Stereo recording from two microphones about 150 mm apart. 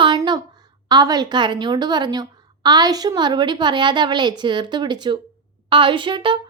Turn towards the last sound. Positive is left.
turn(degrees=-35)  # may be behind; listen again after turning